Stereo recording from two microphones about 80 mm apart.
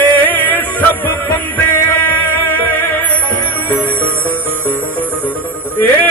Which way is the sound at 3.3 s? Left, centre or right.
Left.